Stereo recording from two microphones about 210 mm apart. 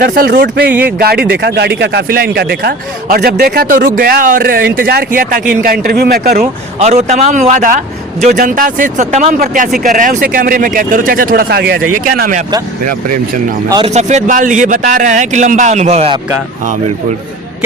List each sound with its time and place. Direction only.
0.0 s speech: 45° right (ahead or behind)
6.7 s speech: 30° right (ahead or behind)
13.7 s speech: 20° right (ahead or behind)
13.9 s speech: 35° right (ahead or behind)